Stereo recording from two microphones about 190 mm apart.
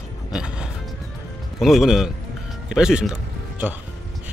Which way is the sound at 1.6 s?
Centre (ahead or behind).